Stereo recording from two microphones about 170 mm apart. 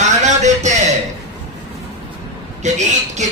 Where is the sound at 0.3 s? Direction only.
45° right (ahead or behind).